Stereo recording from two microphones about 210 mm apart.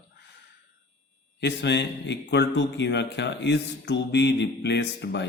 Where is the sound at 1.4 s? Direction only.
55° left (ahead or behind).